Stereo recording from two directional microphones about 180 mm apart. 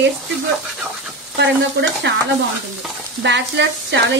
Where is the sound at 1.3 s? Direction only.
75° right (ahead or behind).